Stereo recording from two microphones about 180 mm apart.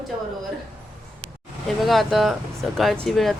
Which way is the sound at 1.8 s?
Centre (ahead or behind).